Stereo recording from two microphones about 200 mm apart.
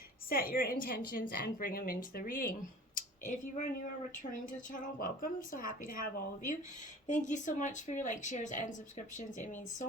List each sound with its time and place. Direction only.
0.3 s a woman's voice: 45° left (ahead or behind)